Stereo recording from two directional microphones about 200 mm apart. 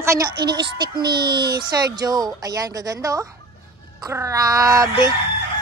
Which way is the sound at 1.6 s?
20° right (ahead or behind).